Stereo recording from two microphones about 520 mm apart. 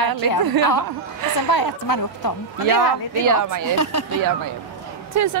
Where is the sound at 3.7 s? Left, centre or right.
Left.